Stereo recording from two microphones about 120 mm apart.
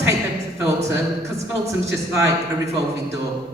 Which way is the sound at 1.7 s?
25° right (ahead or behind).